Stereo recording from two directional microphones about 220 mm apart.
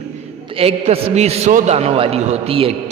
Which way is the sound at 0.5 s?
25° right (ahead or behind).